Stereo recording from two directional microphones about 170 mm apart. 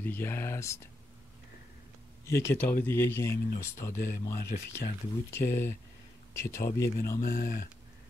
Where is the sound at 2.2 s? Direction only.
10° left (ahead or behind).